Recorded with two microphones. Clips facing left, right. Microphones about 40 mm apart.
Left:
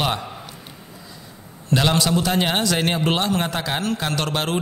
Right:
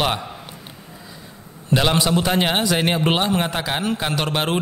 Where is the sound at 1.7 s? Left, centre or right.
Centre.